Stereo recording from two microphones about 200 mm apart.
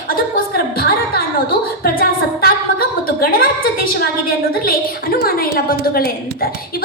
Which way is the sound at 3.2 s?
50° left (ahead or behind).